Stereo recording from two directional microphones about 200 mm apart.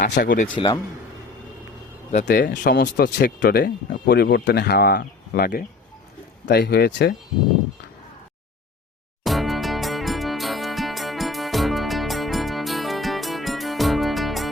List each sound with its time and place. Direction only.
0.1 s speech: 45° left (ahead or behind)
0.5 s speech: 25° left (ahead or behind)
2.2 s speech: 50° left (ahead or behind)
9.2 s music: centre (ahead or behind)